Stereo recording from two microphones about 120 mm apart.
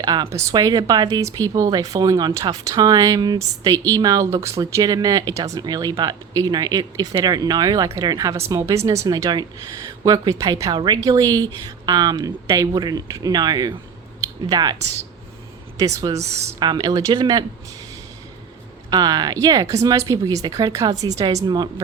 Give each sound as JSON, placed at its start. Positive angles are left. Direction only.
{"t": 0.0, "sound": "speech", "side_deg": -30}
{"t": 15.8, "sound": "speech", "side_deg": -30}
{"t": 18.9, "sound": "speech", "side_deg": -35}